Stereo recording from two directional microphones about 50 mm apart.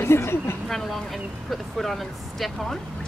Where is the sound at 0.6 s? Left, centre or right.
Centre.